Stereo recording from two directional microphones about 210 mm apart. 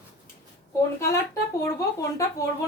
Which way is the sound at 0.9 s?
15° left (ahead or behind).